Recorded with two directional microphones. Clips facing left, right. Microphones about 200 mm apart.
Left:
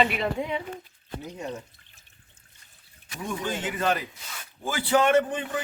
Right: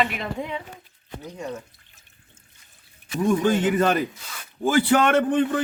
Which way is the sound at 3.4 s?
55° right (ahead or behind).